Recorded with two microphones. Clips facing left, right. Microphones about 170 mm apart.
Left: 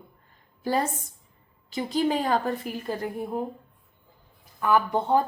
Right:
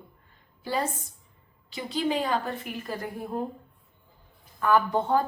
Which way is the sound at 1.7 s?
45° left (ahead or behind).